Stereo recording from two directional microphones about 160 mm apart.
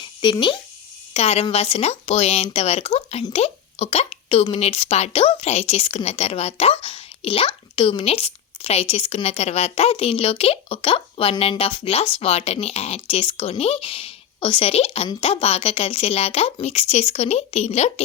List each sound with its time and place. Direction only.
0.0 s toothbrush: 30° left (ahead or behind)
1.1 s speech: 40° left (ahead or behind)